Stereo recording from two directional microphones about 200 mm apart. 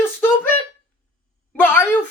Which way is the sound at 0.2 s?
10° left (ahead or behind).